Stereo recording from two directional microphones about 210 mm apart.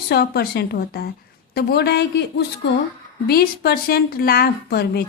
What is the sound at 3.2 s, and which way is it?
Speech, 50° left (ahead or behind).